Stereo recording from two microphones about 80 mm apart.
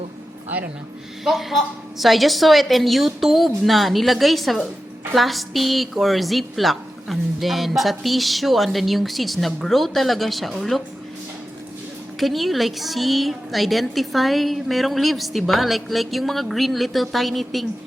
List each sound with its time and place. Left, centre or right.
0.4 s a sound: centre
1.2 s a woman's voice: centre
12.2 s a woman's voice: centre